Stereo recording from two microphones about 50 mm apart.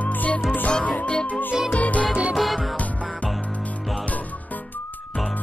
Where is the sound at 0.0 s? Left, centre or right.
Left.